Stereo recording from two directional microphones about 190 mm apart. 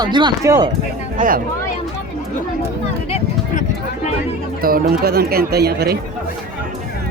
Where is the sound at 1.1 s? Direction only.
45° right (ahead or behind).